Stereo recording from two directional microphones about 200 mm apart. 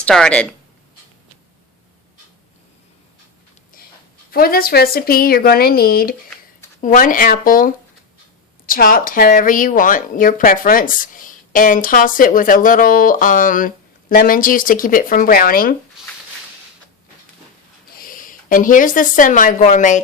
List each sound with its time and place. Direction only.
0.0 s speech: 5° left (ahead or behind)
4.3 s speech: 50° left (ahead or behind)
16.0 s a sound: centre (ahead or behind)
17.9 s speech: 45° left (ahead or behind)